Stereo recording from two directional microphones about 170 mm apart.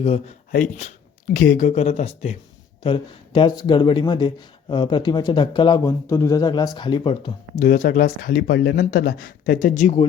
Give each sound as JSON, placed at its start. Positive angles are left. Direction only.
{"t": 0.0, "sound": "speech", "side_deg": 35}
{"t": 0.5, "sound": "speech", "side_deg": 50}
{"t": 7.6, "sound": "speech", "side_deg": 50}